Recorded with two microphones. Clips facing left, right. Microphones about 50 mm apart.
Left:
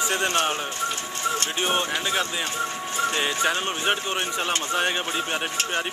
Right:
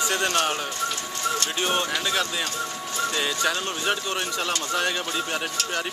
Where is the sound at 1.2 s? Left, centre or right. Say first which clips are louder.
Even; left.